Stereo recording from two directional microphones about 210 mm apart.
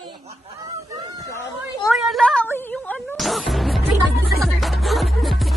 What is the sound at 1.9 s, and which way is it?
Music, centre (ahead or behind).